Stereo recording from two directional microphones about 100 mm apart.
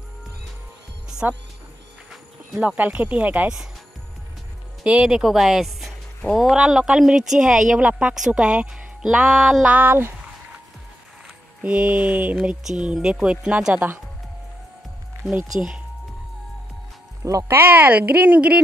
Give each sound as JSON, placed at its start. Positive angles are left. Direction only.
{"t": 1.2, "sound": "speech", "side_deg": -20}
{"t": 2.5, "sound": "speech", "side_deg": -15}
{"t": 4.8, "sound": "speech", "side_deg": -10}
{"t": 9.8, "sound": "speech", "side_deg": -20}
{"t": 11.6, "sound": "speech", "side_deg": -10}
{"t": 15.5, "sound": "speech", "side_deg": -15}
{"t": 17.2, "sound": "speech", "side_deg": -35}
{"t": 17.5, "sound": "speech", "side_deg": -20}